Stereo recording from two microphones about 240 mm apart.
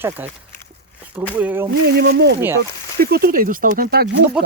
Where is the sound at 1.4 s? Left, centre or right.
Centre.